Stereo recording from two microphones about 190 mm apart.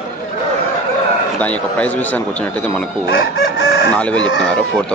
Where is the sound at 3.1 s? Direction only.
60° left (ahead or behind).